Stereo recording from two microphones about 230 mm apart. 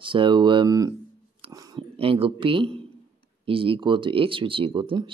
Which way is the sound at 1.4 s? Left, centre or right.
Centre.